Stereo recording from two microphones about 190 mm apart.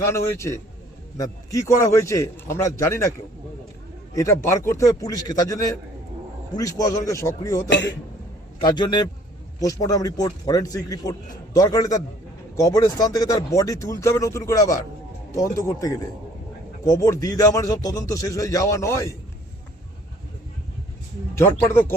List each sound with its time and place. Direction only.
0.0 s a man's voice: 15° left (ahead or behind)
4.1 s a man's voice: 15° left (ahead or behind)
16.8 s speech: 15° left (ahead or behind)
21.3 s speech: 10° left (ahead or behind)